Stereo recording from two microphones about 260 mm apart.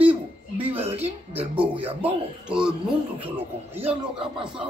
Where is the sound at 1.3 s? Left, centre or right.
Centre.